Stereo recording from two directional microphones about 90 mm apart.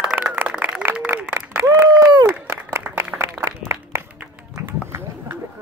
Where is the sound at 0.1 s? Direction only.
20° right (ahead or behind).